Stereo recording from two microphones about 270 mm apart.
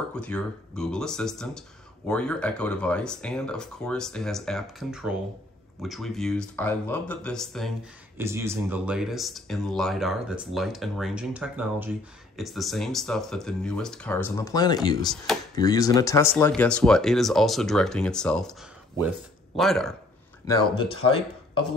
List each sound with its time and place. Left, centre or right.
0.1 s speech: centre
8.2 s speech: centre
20.4 s speech: centre